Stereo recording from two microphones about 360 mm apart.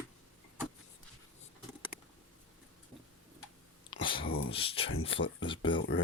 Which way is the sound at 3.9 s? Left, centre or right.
Centre.